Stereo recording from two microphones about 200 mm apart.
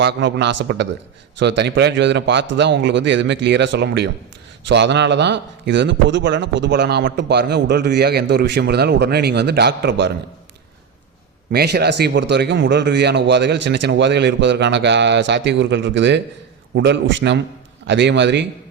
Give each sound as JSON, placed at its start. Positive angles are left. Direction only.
{"t": 0.0, "sound": "a man's voice", "side_deg": -60}
{"t": 11.5, "sound": "a man's voice", "side_deg": -55}